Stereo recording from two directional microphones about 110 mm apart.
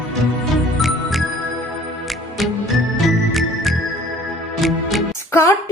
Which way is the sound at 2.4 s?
Centre (ahead or behind).